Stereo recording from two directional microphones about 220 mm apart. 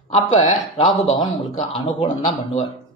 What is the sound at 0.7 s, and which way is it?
Speech, 25° left (ahead or behind).